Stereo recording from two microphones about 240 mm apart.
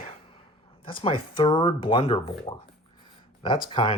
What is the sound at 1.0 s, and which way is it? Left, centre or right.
Speech, left.